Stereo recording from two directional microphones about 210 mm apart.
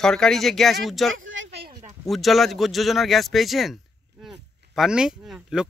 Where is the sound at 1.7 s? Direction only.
30° right (ahead or behind).